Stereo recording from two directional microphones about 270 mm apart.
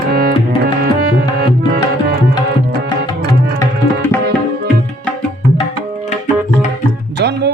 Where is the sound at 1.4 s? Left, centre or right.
Right.